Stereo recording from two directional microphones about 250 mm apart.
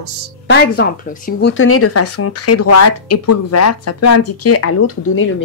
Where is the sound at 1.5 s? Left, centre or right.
Left.